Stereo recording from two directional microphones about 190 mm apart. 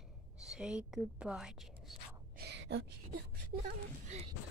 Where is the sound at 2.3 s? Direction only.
60° right (ahead or behind).